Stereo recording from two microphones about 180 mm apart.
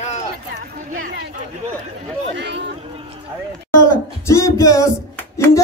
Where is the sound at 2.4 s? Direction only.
75° right (ahead or behind).